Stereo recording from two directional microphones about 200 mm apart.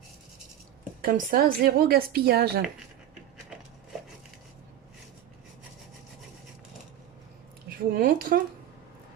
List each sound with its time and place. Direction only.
1.0 s a woman's voice: 45° right (ahead or behind)
7.9 s a woman's voice: 45° right (ahead or behind)